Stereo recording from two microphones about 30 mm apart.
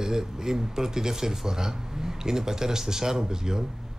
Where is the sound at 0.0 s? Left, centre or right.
Centre.